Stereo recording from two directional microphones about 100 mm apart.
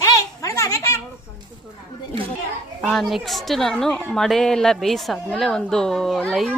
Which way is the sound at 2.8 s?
Centre (ahead or behind).